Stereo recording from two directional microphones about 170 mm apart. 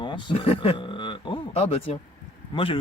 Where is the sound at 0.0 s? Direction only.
30° left (ahead or behind).